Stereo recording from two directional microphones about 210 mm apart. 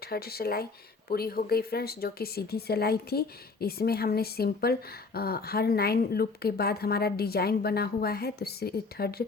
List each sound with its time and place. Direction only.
0.1 s speech: 45° left (ahead or behind)